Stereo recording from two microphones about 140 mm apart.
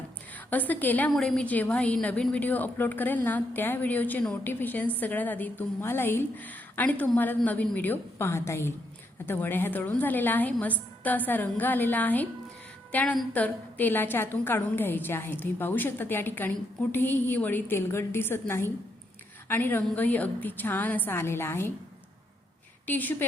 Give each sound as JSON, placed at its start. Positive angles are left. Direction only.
{"t": 0.3, "sound": "a woman's voice", "side_deg": 10}
{"t": 22.9, "sound": "a woman's voice", "side_deg": 15}